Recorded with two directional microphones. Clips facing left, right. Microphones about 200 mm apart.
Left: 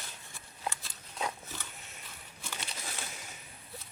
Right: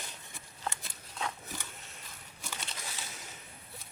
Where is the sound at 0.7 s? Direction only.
20° right (ahead or behind).